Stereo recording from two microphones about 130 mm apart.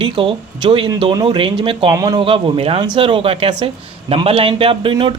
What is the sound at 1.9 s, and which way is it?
Speech, 30° right (ahead or behind).